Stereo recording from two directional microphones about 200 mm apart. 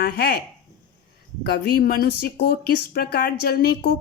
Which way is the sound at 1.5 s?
45° left (ahead or behind).